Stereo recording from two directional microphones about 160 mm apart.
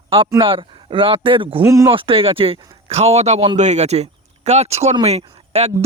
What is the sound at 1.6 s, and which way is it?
Speech, 20° right (ahead or behind).